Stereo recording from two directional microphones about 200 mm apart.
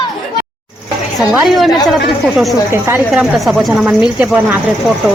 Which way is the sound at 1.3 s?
Centre (ahead or behind).